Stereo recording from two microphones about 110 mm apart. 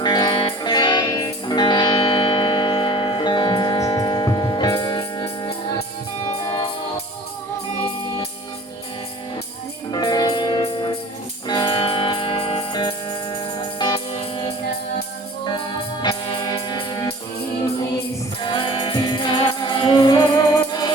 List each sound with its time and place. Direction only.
0.0 s music: 40° left (ahead or behind)
2.0 s tick-tock: 55° left (ahead or behind)
3.8 s music: 35° left (ahead or behind)
9.9 s music: 35° left (ahead or behind); by 12.6 s 60° left (ahead or behind)
12.7 s music: 45° left (ahead or behind)
14.1 s music: 60° left (ahead or behind)
15.4 s music: 40° left (ahead or behind)
18.4 s music: 50° left (ahead or behind)